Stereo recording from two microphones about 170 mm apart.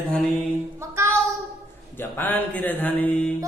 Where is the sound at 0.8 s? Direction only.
15° right (ahead or behind).